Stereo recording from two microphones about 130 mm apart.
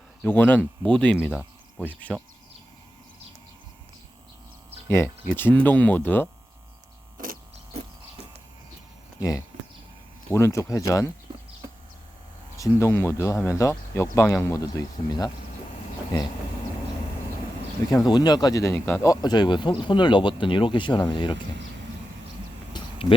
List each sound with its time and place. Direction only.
0.2 s speech: 15° left (ahead or behind)
4.9 s speech: 20° left (ahead or behind)
9.5 s a sound: 65° right (ahead or behind)
10.3 s speech: 20° left (ahead or behind)
12.6 s speech: 20° left (ahead or behind)
17.9 s speech: 35° left (ahead or behind)
22.7 s a sound: 45° left (ahead or behind)